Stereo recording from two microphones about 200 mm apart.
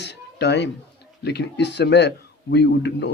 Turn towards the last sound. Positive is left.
turn(degrees=60)  # may be behind; listen again after turning